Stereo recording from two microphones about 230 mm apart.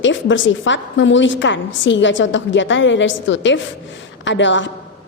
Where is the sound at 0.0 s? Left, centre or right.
Left.